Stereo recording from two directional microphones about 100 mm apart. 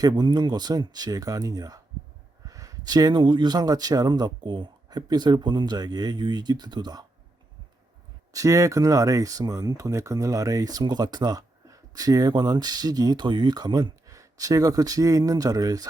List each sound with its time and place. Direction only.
0.0 s speech: 45° right (ahead or behind)
8.3 s speech: 35° right (ahead or behind)